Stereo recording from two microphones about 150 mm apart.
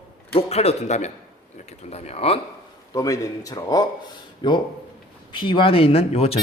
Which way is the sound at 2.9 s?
25° left (ahead or behind).